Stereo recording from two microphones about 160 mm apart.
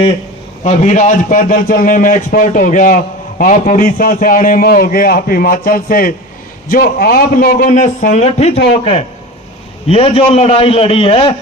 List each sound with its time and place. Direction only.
0.6 s a man's voice: 45° left (ahead or behind)